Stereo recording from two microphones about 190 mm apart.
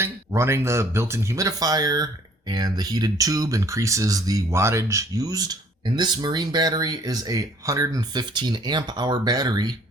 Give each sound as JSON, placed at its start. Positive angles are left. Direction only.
{"t": 0.0, "sound": "speech", "side_deg": -15}